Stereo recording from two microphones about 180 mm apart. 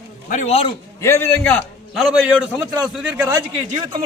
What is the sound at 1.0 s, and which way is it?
A man's voice, 15° left (ahead or behind).